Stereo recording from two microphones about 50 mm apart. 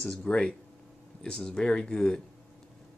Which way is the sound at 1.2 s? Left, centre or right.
Left.